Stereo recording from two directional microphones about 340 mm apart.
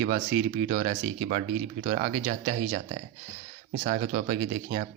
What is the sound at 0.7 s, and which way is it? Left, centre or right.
Speech, right.